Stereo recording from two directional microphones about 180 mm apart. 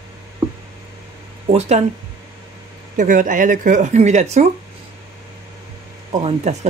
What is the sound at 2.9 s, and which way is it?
Speech, 45° right (ahead or behind).